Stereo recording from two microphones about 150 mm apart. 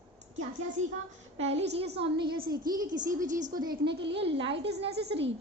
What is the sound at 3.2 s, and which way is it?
Speech, 55° right (ahead or behind).